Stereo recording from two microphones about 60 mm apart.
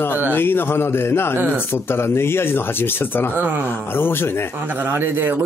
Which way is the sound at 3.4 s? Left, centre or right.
Right.